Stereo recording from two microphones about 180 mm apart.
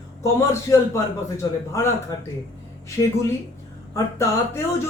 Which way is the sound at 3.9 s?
15° left (ahead or behind).